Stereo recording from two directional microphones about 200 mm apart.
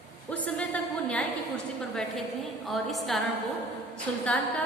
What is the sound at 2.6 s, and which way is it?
A woman's voice, centre (ahead or behind).